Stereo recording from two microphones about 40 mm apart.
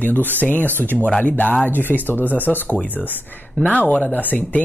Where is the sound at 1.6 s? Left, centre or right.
Left.